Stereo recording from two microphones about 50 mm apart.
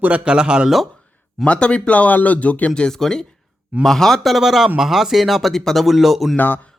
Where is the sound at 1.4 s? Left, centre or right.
Left.